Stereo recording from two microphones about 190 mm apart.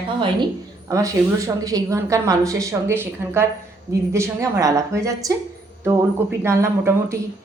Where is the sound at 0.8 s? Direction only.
15° right (ahead or behind).